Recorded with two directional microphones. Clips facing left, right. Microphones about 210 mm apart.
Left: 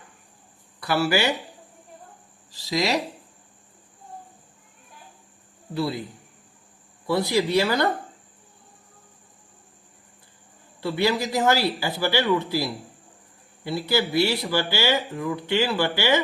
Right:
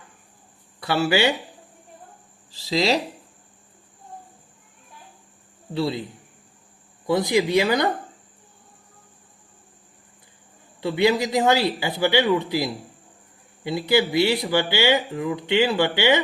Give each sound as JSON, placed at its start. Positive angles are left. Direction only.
{"t": 0.8, "sound": "speech", "side_deg": -20}
{"t": 2.5, "sound": "speech", "side_deg": -30}
{"t": 5.7, "sound": "speech", "side_deg": -20}
{"t": 7.1, "sound": "speech", "side_deg": -20}
{"t": 10.8, "sound": "speech", "side_deg": -20}